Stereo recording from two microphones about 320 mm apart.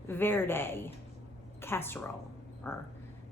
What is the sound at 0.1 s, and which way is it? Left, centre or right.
A woman's voice, centre.